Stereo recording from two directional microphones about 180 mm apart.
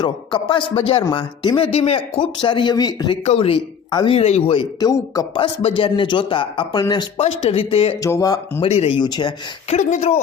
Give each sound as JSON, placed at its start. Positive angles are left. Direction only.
{"t": 0.0, "sound": "speech", "side_deg": 25}
{"t": 3.2, "sound": "speech", "side_deg": 30}
{"t": 7.2, "sound": "speech", "side_deg": 35}
{"t": 8.0, "sound": "speech", "side_deg": 20}
{"t": 8.6, "sound": "speech", "side_deg": 35}
{"t": 9.6, "sound": "speech", "side_deg": 40}